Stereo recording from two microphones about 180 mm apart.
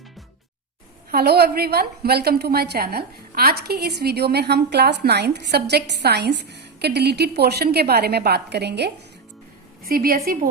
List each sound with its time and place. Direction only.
1.1 s a woman's voice: 60° right (ahead or behind)
9.8 s a woman's voice: 55° right (ahead or behind)